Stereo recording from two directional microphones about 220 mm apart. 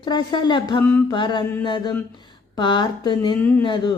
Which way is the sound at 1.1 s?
20° left (ahead or behind).